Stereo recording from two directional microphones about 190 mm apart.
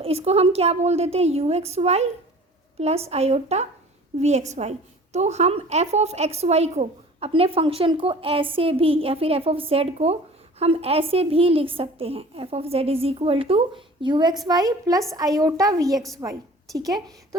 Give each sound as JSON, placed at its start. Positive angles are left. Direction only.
{"t": 0.0, "sound": "a woman's voice", "side_deg": -30}